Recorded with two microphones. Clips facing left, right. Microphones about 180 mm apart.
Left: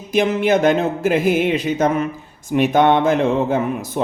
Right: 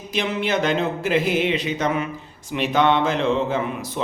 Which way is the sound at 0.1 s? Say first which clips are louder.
Left 7 dB; 50° left (ahead or behind).